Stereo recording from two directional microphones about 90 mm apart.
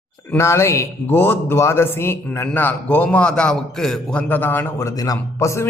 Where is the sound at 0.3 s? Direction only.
30° left (ahead or behind).